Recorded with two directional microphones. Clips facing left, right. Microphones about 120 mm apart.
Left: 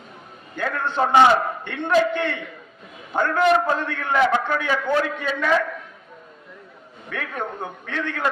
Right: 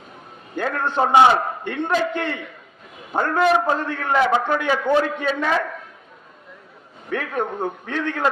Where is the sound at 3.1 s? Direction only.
15° right (ahead or behind).